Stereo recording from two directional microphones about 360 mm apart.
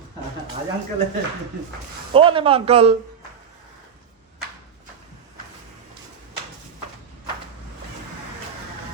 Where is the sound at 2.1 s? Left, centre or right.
Centre.